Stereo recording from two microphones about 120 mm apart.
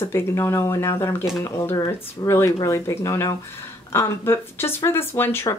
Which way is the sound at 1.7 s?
35° left (ahead or behind).